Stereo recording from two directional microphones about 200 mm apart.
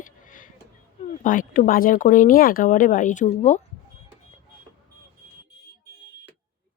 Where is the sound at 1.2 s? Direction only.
40° left (ahead or behind).